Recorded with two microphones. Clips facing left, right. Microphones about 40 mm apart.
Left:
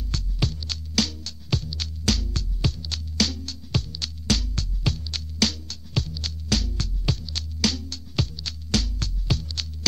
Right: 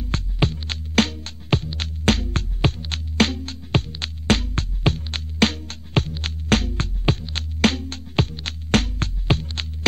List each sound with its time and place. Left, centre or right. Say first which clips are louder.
0.0 s music: right 6 dB; right